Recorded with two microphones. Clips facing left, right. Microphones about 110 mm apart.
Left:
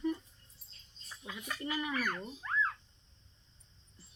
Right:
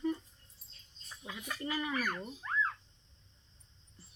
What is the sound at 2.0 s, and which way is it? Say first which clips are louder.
Speech: even; 10° right (ahead or behind).